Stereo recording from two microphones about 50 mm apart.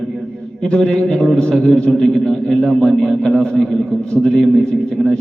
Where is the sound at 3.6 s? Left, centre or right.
Centre.